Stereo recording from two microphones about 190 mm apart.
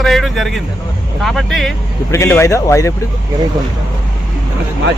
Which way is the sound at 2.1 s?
15° left (ahead or behind).